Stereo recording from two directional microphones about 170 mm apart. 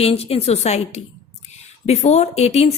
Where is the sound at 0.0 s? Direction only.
35° left (ahead or behind).